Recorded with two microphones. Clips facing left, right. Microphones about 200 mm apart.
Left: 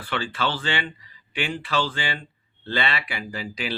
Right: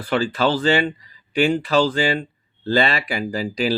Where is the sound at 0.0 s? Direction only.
40° right (ahead or behind).